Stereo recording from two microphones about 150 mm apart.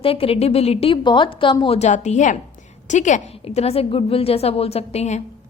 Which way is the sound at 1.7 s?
50° left (ahead or behind).